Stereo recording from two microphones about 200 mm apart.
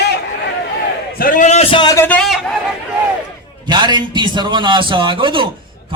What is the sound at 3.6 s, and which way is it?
A man's voice, 20° right (ahead or behind).